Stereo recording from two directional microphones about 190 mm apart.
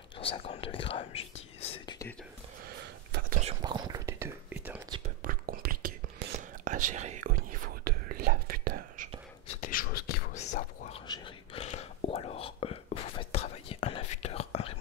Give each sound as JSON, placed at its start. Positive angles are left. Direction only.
{"t": 0.2, "sound": "speech", "side_deg": 30}
{"t": 3.1, "sound": "whispering", "side_deg": -50}
{"t": 3.6, "sound": "whispering", "side_deg": -20}
{"t": 5.2, "sound": "whispering", "side_deg": -50}
{"t": 9.6, "sound": "beatboxing", "side_deg": 50}
{"t": 10.3, "sound": "whispering", "side_deg": 35}